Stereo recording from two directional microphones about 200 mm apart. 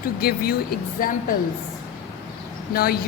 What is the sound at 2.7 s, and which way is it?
Speech, 50° left (ahead or behind).